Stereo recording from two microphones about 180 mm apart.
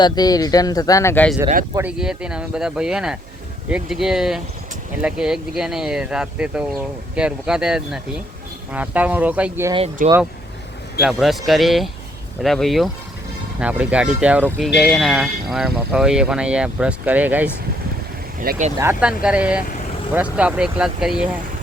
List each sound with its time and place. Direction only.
0.0 s speech: 20° left (ahead or behind)
1.7 s speech: 10° right (ahead or behind)
10.0 s speech: 50° right (ahead or behind)
11.0 s speech: centre (ahead or behind)
18.5 s speech: 55° right (ahead or behind)
18.8 s speech: 10° right (ahead or behind)